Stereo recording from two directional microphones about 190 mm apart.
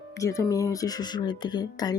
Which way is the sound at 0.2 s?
15° left (ahead or behind).